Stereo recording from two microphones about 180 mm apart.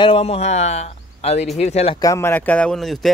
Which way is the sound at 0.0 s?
30° left (ahead or behind).